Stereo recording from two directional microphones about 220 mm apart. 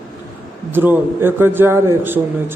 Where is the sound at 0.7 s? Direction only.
10° right (ahead or behind).